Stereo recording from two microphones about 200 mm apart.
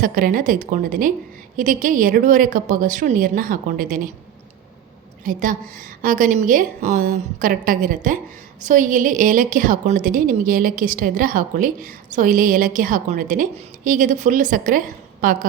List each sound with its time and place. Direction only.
0.0 s a woman's voice: 45° right (ahead or behind)
5.2 s a woman's voice: 45° right (ahead or behind)